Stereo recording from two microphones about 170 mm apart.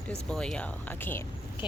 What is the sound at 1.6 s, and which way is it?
Speech, 25° left (ahead or behind).